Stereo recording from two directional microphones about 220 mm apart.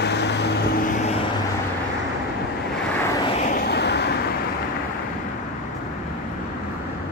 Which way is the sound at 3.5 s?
45° left (ahead or behind).